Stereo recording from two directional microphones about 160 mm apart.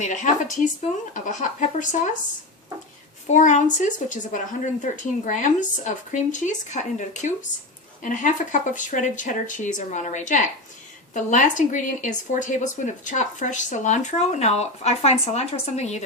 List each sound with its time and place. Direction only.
0.0 s a woman's voice: 50° left (ahead or behind)
3.2 s a woman's voice: 50° left (ahead or behind)